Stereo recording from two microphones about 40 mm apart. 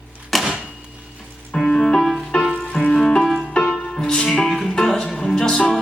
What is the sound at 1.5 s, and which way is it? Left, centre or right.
Music, centre.